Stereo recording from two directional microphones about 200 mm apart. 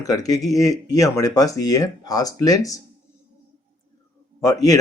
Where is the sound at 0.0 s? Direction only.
15° left (ahead or behind).